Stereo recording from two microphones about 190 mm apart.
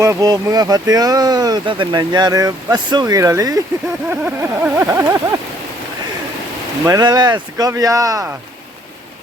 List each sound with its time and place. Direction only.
0.0 s speech: 15° right (ahead or behind)
6.8 s speech: 20° right (ahead or behind)